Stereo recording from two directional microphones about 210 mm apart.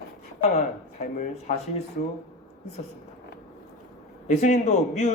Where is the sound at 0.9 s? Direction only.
40° left (ahead or behind).